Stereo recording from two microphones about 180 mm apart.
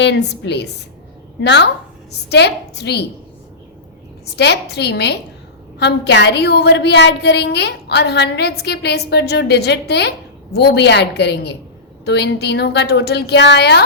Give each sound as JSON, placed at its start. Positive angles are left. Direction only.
{"t": 0.0, "sound": "a woman's voice", "side_deg": 70}
{"t": 4.4, "sound": "a woman's voice", "side_deg": 70}